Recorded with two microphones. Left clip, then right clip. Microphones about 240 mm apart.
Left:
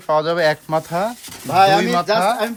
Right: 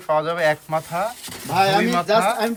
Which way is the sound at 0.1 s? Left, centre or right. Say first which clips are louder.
Left 3 dB; left.